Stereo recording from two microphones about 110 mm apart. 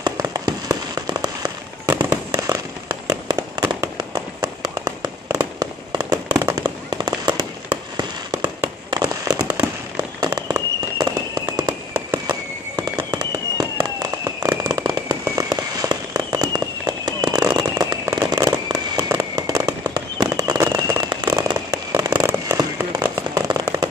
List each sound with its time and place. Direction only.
0.0 s fireworks: 35° right (ahead or behind)
23.1 s firecracker: 30° right (ahead or behind)